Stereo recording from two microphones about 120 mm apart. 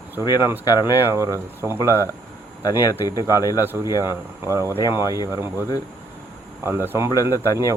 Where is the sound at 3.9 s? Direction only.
30° left (ahead or behind).